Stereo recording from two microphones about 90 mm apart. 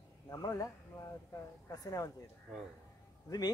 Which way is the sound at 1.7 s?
45° left (ahead or behind).